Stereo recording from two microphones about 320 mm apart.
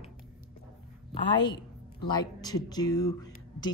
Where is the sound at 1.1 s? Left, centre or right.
Centre.